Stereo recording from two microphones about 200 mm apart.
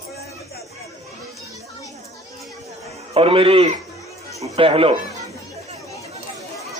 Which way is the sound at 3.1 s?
25° right (ahead or behind).